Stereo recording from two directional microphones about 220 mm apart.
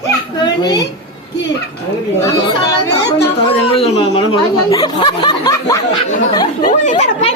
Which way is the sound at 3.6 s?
25° left (ahead or behind).